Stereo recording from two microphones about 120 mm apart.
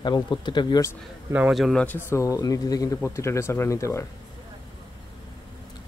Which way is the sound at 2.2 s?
30° left (ahead or behind).